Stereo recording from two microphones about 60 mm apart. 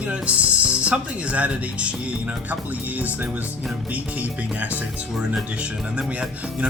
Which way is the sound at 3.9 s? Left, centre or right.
Right.